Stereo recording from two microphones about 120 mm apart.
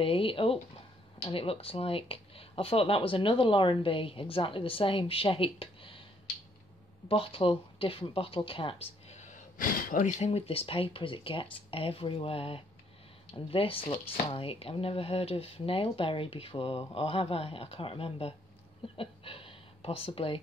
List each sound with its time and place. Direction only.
0.0 s speech: 50° left (ahead or behind)
7.1 s speech: 50° left (ahead or behind)
9.9 s speech: 90° left; by 18.3 s 50° left (ahead or behind)
18.9 s a sound: 50° left (ahead or behind)